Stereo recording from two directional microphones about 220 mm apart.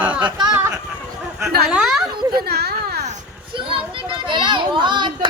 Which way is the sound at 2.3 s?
45° right (ahead or behind).